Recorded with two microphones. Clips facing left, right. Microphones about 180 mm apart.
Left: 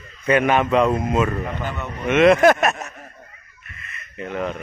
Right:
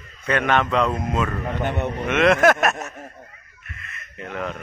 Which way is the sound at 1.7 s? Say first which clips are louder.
Right 5 dB; 65° right (ahead or behind).